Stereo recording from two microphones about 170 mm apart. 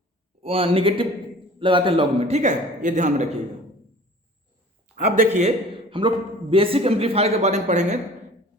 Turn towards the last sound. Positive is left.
turn(degrees=-45)  # may be behind; listen again after turning